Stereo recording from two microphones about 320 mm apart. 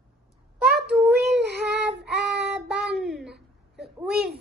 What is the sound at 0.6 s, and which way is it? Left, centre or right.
Child singing, right.